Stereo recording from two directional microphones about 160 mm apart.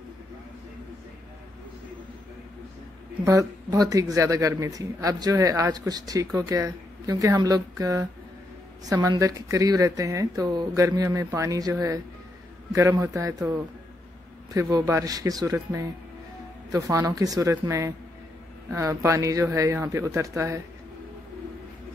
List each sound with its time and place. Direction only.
3.3 s speech: 20° right (ahead or behind)